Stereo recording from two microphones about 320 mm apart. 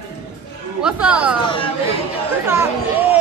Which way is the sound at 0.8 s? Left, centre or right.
Centre.